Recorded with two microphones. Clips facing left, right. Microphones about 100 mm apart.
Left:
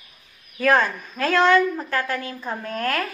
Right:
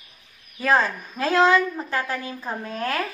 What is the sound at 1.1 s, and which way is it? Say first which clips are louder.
A woman's voice: left 1 dB; 30° right (ahead or behind).